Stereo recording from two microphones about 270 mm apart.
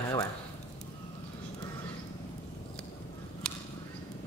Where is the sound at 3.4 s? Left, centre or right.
Centre.